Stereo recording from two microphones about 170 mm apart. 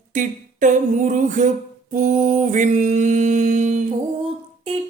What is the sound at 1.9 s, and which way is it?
Mantra, 45° right (ahead or behind).